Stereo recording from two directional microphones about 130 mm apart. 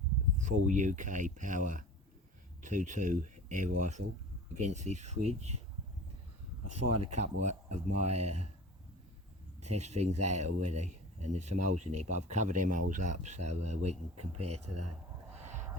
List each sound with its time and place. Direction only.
0.3 s speech: 75° right (ahead or behind)
7.0 s speech: 60° right (ahead or behind)
9.6 s speech: 60° right (ahead or behind)